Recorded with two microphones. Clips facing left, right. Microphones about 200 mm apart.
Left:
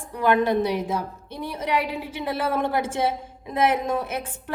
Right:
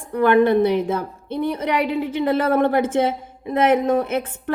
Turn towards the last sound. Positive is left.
turn(degrees=-55)  # may be behind; listen again after turning